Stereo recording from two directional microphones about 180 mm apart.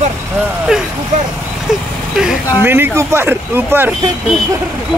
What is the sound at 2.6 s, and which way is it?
Speech, 10° right (ahead or behind).